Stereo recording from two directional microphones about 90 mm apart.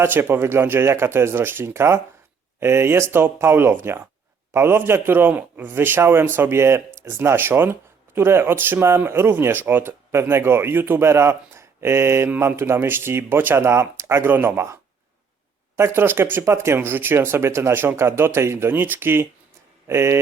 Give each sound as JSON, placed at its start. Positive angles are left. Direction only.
{"t": 0.0, "sound": "a man's voice", "side_deg": -25}